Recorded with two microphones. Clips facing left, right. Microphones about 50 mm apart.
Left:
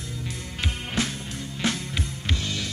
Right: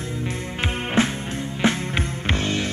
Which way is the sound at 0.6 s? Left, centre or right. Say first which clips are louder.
Right 7 dB; right.